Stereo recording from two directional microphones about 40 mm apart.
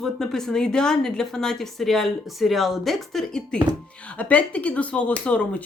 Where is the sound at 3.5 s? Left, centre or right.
Left.